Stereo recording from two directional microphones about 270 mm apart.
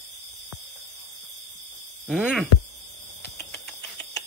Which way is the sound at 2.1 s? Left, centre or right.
Centre.